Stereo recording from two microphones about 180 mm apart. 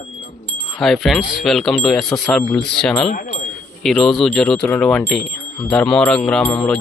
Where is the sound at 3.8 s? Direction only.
Centre (ahead or behind).